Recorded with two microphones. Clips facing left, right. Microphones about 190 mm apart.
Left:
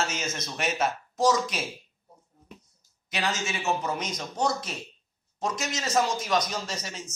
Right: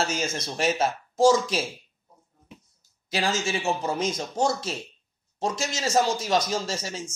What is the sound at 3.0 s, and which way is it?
Speech, 30° right (ahead or behind).